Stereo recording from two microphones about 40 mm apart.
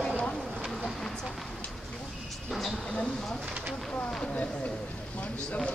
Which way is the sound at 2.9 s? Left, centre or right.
Left.